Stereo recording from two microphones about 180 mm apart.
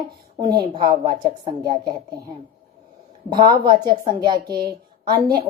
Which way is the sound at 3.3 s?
25° right (ahead or behind).